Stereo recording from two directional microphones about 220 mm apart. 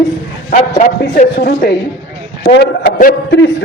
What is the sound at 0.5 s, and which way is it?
A man's voice, 35° left (ahead or behind).